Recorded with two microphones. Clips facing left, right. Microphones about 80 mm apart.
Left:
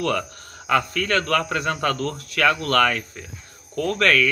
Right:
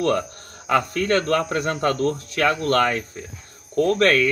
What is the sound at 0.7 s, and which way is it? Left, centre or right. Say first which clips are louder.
Speech: right 1 dB; right.